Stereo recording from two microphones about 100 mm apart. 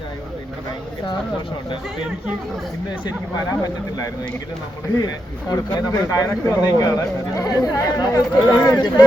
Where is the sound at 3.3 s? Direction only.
40° left (ahead or behind).